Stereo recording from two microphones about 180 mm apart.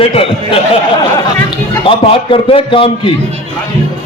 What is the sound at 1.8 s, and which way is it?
A man's voice, 30° left (ahead or behind).